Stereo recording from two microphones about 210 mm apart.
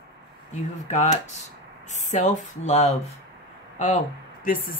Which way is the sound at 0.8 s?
35° left (ahead or behind).